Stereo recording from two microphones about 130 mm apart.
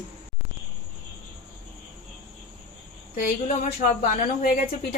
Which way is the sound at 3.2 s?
75° left (ahead or behind).